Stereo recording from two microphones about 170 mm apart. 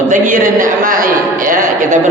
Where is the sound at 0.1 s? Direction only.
50° right (ahead or behind).